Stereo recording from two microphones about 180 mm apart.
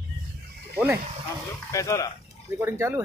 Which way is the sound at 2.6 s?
15° right (ahead or behind).